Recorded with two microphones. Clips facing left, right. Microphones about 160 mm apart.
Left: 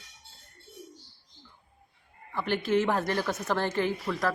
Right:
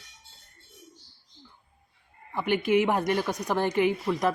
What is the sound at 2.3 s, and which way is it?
A woman's voice, 15° right (ahead or behind).